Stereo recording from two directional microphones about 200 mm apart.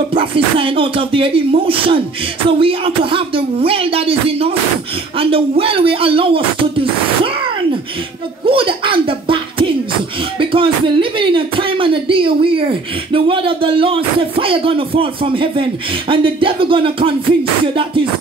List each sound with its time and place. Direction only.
0.1 s speech: 25° right (ahead or behind)
8.5 s speech: 25° right (ahead or behind)